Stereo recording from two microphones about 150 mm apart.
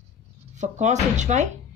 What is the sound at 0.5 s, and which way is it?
Speech, 55° right (ahead or behind).